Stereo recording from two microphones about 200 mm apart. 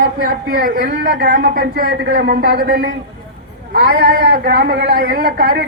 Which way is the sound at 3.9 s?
50° right (ahead or behind).